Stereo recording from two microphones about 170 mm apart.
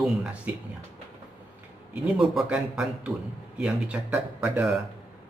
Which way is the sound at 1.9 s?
5° right (ahead or behind).